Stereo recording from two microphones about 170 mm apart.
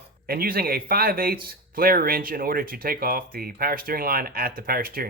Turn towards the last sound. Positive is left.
turn(degrees=-60)  # may be behind; listen again after turning